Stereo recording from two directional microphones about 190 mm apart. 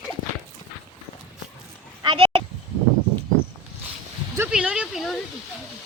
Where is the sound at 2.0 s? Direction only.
30° right (ahead or behind).